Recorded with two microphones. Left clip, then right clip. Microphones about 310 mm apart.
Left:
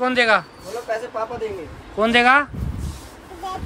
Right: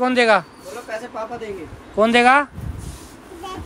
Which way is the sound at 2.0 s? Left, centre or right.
Centre.